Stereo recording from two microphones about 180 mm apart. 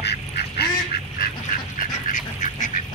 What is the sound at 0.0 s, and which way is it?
Duck, 65° left (ahead or behind).